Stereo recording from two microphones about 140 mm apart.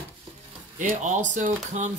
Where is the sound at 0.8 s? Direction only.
60° right (ahead or behind).